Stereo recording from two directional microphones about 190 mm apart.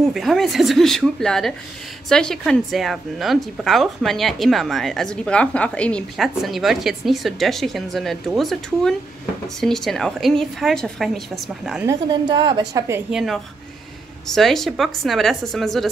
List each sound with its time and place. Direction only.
0.0 s a woman's voice: centre (ahead or behind)
11.8 s a woman's voice: 20° right (ahead or behind)
13.1 s a woman's voice: 5° right (ahead or behind)